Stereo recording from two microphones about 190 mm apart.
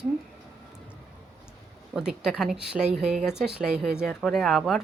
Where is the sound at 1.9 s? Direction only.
5° right (ahead or behind).